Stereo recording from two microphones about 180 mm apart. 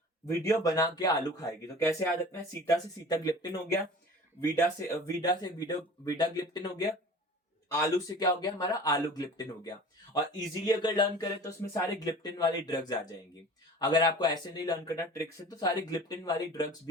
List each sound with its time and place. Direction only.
0.3 s speech: 15° left (ahead or behind)